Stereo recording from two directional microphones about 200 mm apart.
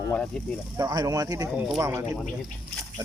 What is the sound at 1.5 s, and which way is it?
Speech, 5° right (ahead or behind).